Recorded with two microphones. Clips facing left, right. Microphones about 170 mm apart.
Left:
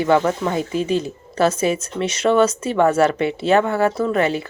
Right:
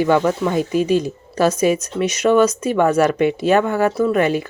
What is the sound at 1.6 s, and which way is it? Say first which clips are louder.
Speech: right 3 dB; 15° right (ahead or behind).